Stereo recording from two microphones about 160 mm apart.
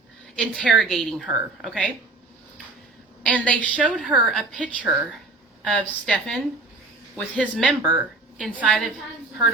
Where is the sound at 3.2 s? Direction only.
10° left (ahead or behind).